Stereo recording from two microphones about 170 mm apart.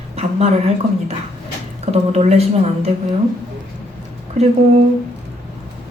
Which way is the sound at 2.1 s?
40° right (ahead or behind).